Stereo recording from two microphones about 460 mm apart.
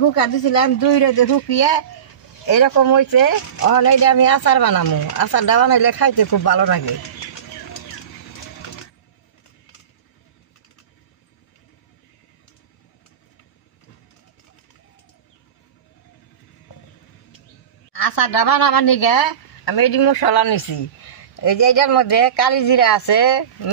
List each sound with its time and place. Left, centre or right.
0.0 s speech: left
2.4 s speech: left
18.0 s speech: left